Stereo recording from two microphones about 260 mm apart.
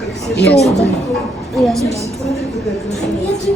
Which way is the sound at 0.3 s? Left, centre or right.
Left.